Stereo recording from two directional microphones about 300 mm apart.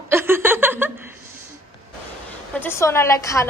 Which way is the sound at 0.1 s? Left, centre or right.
Centre.